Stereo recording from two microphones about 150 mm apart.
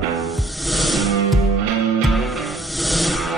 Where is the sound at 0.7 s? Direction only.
Centre (ahead or behind).